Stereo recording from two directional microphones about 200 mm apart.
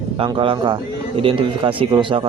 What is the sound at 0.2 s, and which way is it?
Speech, 25° right (ahead or behind).